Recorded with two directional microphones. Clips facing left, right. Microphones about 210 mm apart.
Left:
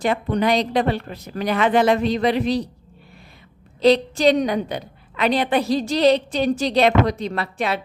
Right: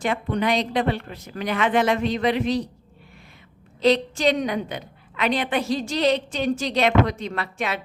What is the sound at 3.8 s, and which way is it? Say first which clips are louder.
A woman's voice: left 4 dB; 35° left (ahead or behind).